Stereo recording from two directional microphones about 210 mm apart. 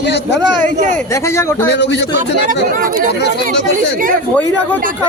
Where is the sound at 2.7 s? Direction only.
40° right (ahead or behind).